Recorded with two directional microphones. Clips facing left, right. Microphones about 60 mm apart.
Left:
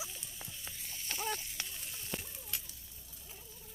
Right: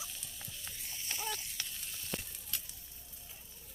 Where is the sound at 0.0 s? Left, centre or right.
Centre.